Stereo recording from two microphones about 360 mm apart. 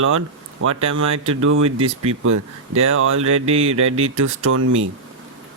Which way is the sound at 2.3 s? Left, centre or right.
Right.